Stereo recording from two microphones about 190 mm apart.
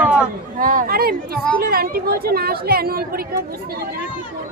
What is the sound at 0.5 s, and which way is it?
Speech, 45° right (ahead or behind).